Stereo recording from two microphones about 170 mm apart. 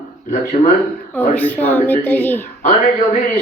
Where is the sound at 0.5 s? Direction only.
40° left (ahead or behind).